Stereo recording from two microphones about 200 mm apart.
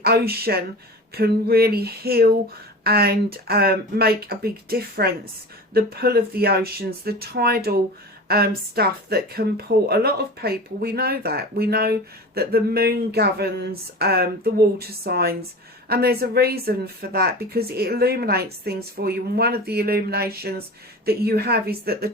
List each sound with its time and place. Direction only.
0.0 s speech: 50° right (ahead or behind)